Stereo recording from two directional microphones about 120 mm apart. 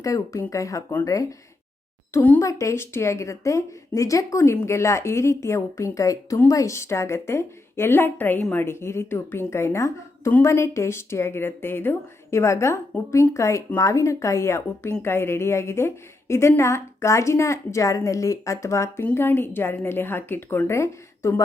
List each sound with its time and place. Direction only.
0.0 s a woman's voice: 25° left (ahead or behind)
2.4 s a woman's voice: 25° left (ahead or behind)